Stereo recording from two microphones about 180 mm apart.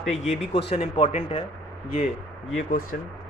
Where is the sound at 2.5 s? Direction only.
50° left (ahead or behind).